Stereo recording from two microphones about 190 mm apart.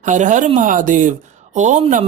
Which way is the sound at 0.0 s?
40° right (ahead or behind).